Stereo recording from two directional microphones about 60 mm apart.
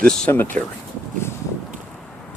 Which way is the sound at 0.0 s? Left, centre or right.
Centre.